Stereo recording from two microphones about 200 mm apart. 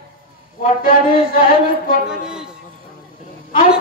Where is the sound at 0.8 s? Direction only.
45° left (ahead or behind).